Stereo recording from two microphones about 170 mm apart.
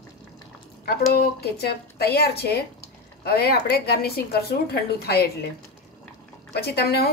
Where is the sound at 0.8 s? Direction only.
65° left (ahead or behind).